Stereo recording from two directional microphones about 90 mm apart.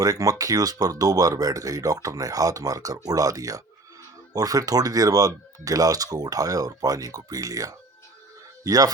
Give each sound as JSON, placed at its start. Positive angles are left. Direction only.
{"t": 0.0, "sound": "speech", "side_deg": -40}